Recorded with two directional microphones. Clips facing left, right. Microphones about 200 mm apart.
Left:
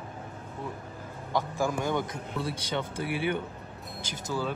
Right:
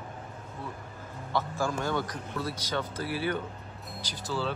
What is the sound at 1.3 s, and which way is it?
A man's voice, 15° left (ahead or behind).